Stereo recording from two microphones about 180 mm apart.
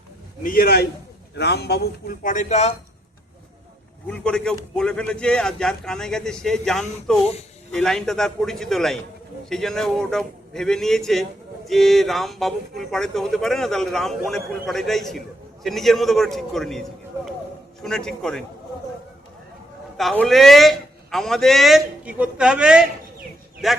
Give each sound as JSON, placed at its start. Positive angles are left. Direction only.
{"t": 0.4, "sound": "a man's voice", "side_deg": 55}
{"t": 4.0, "sound": "a man's voice", "side_deg": 5}
{"t": 17.8, "sound": "a man's voice", "side_deg": 5}
{"t": 20.0, "sound": "a man's voice", "side_deg": 0}